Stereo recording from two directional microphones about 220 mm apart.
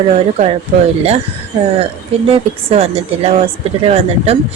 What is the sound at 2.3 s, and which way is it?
Speech, 25° right (ahead or behind).